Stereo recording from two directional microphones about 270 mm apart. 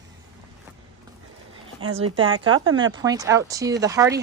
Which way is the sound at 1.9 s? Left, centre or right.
Right.